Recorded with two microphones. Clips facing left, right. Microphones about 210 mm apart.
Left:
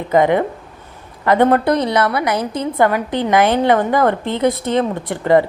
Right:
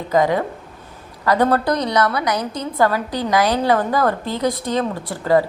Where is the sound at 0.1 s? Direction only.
25° left (ahead or behind).